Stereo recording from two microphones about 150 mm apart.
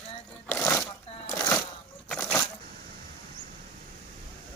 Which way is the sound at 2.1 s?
10° left (ahead or behind).